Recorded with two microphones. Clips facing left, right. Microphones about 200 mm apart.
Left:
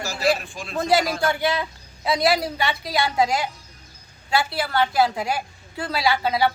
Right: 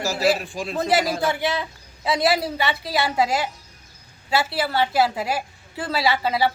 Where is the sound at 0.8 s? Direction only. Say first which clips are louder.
Left 1 dB; centre (ahead or behind).